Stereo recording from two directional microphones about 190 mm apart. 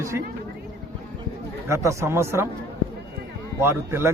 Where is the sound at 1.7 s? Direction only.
15° right (ahead or behind).